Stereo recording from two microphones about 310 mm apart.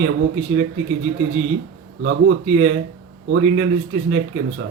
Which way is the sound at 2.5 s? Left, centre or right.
Right.